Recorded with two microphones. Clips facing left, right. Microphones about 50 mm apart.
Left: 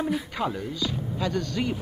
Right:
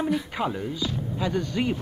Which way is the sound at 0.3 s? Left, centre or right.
Centre.